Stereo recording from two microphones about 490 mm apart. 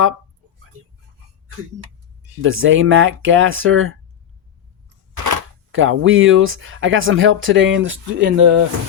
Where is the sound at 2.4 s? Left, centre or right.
Right.